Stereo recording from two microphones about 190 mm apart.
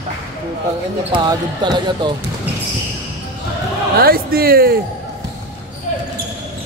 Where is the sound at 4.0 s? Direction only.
50° right (ahead or behind).